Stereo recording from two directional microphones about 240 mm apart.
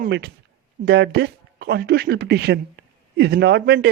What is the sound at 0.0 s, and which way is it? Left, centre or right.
A man's voice, right.